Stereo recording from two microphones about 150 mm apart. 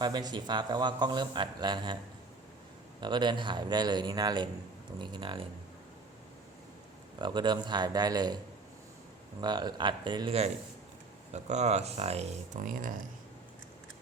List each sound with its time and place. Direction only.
0.0 s a man's voice: 30° right (ahead or behind)
3.0 s a man's voice: 30° right (ahead or behind)
7.2 s a man's voice: 30° right (ahead or behind)
9.4 s speech: 30° right (ahead or behind); by 12.3 s 45° right (ahead or behind)
12.6 s speech: 65° right (ahead or behind)